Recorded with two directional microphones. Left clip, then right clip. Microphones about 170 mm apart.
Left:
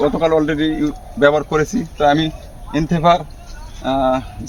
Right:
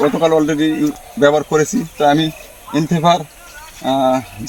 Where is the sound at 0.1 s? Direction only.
10° left (ahead or behind).